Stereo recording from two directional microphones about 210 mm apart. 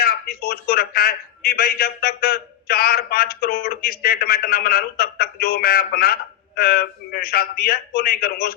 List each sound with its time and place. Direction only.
0.0 s a man's voice: 45° left (ahead or behind)